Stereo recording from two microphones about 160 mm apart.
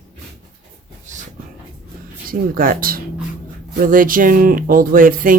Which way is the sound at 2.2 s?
65° right (ahead or behind).